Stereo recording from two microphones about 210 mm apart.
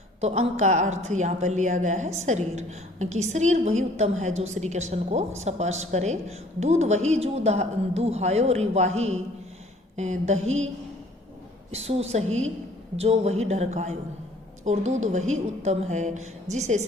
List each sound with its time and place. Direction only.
0.2 s a woman's voice: 30° right (ahead or behind)
10.0 s a woman's voice: 35° right (ahead or behind)
11.7 s a woman's voice: 30° right (ahead or behind)